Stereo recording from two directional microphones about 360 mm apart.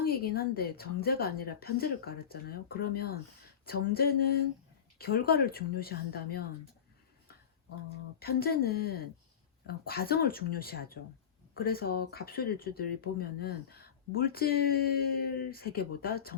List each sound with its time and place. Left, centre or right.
0.0 s speech: left
8.2 s speech: left